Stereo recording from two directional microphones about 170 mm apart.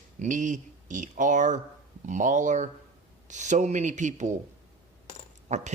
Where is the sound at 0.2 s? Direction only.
50° right (ahead or behind).